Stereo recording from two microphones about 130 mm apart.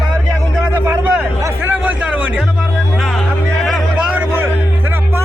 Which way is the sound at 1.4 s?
20° right (ahead or behind).